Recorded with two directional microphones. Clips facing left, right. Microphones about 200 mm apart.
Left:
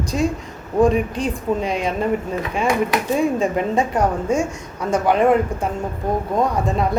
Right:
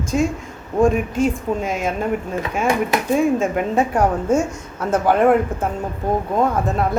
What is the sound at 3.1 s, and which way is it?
A woman's voice, 5° right (ahead or behind).